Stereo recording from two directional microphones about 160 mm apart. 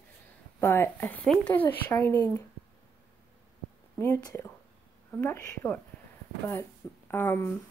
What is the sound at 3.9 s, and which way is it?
Speech, 15° left (ahead or behind).